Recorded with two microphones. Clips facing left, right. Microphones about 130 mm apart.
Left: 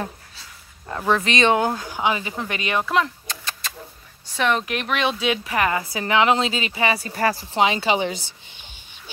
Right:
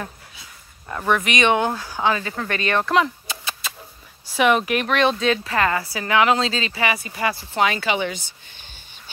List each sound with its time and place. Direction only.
0.8 s speech: 20° left (ahead or behind)
1.8 s speech: 15° left (ahead or behind)
3.0 s a sound: 5° right (ahead or behind)
4.4 s speech: 5° right (ahead or behind); by 7.1 s 25° left (ahead or behind)
7.1 s speech: 40° left (ahead or behind)
7.5 s speech: 25° left (ahead or behind)